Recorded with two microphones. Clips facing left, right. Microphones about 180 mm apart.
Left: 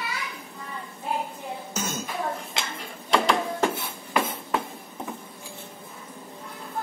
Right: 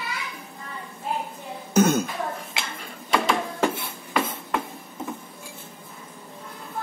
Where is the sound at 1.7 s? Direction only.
60° right (ahead or behind).